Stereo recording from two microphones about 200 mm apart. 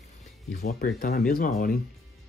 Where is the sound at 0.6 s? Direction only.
50° left (ahead or behind).